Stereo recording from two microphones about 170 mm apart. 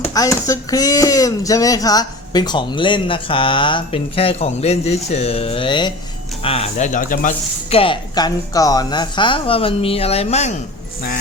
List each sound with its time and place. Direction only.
0.0 s speech: 20° left (ahead or behind); by 7.3 s 50° left (ahead or behind)
7.7 s speech: 30° left (ahead or behind)